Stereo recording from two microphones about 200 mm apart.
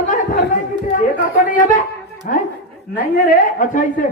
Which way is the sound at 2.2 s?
40° left (ahead or behind).